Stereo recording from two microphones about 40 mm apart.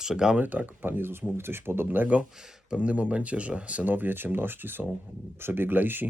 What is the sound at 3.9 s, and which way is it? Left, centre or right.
Speech, right.